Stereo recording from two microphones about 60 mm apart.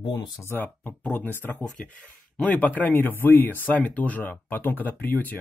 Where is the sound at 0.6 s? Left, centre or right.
Left.